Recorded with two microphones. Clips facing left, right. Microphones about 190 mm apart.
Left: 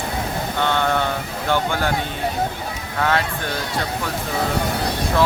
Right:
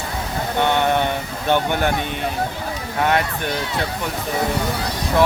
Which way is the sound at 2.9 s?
20° right (ahead or behind).